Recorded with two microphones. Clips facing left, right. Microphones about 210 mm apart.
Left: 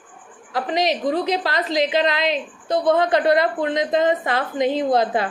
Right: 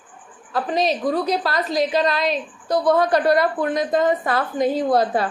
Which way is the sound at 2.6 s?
25° left (ahead or behind).